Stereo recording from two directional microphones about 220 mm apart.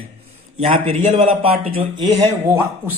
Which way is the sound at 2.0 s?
15° right (ahead or behind).